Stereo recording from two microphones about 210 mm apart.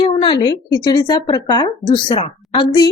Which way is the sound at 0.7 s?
20° left (ahead or behind).